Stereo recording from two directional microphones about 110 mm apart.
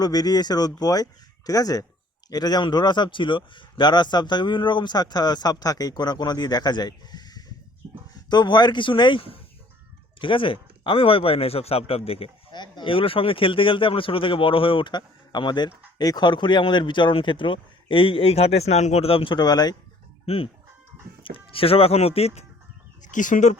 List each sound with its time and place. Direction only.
0.0 s speech: 35° left (ahead or behind); by 12.3 s 60° left (ahead or behind)
12.5 s speech: 40° left (ahead or behind)
20.2 s chicken: 60° left (ahead or behind)
21.2 s speech: 55° left (ahead or behind)